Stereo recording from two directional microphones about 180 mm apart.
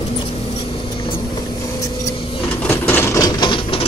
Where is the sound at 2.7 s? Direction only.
15° left (ahead or behind).